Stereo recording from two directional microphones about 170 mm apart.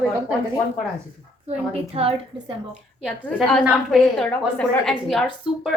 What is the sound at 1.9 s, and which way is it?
Speech, 35° right (ahead or behind).